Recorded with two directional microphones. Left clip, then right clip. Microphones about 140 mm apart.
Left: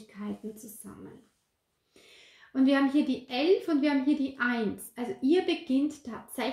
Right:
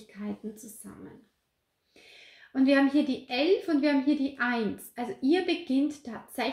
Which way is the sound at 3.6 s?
30° left (ahead or behind).